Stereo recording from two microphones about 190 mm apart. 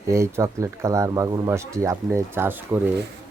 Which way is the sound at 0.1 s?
15° right (ahead or behind).